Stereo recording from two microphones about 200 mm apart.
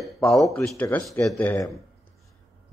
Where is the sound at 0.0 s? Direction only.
Centre (ahead or behind).